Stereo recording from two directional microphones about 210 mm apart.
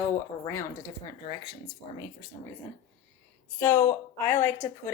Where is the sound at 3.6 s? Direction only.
10° left (ahead or behind).